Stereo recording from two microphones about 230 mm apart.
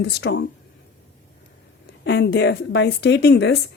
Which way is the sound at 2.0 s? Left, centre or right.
Left.